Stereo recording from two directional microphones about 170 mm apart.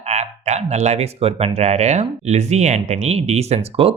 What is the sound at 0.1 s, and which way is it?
Speech, 40° right (ahead or behind).